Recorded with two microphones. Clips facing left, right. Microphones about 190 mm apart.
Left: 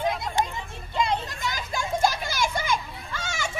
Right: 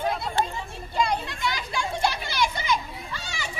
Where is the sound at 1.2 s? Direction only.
45° left (ahead or behind).